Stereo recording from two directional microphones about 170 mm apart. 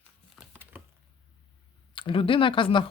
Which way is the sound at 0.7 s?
10° right (ahead or behind).